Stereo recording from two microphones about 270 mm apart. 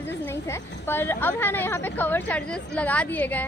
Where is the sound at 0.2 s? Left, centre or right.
Centre.